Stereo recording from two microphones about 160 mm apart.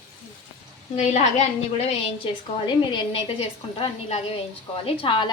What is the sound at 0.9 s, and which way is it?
A woman's voice, 45° left (ahead or behind).